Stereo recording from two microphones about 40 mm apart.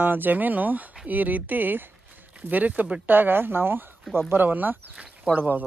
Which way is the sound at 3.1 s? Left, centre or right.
Right.